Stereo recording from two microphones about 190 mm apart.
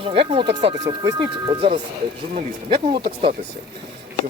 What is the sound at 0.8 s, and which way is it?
Speech, 20° right (ahead or behind).